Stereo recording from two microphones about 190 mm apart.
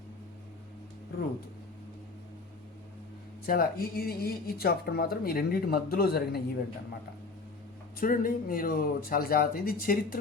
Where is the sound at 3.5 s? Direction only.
50° left (ahead or behind).